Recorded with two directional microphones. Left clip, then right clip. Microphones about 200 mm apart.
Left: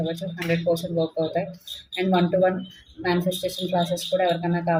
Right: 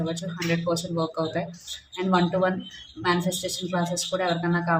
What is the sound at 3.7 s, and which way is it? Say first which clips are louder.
A woman's voice: left 4 dB; 20° right (ahead or behind).